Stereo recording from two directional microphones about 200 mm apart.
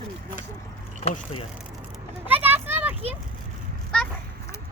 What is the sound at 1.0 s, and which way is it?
Speech, 30° left (ahead or behind).